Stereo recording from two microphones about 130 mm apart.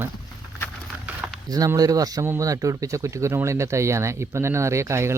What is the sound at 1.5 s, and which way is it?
Speech, 30° right (ahead or behind).